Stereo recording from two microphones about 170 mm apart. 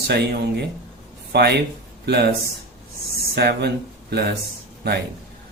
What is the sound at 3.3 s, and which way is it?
Speech, 75° right (ahead or behind).